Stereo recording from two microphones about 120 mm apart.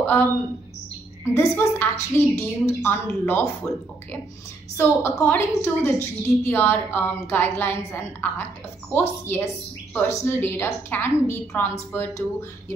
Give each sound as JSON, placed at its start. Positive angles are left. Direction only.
{"t": 0.0, "sound": "a woman's voice", "side_deg": 20}
{"t": 4.7, "sound": "a woman's voice", "side_deg": 20}